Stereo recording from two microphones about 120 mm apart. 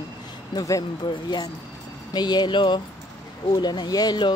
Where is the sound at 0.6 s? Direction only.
30° left (ahead or behind).